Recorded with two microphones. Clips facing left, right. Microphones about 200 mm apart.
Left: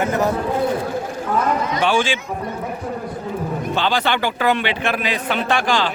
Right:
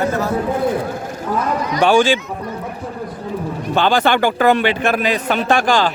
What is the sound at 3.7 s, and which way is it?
A man's voice, 50° right (ahead or behind).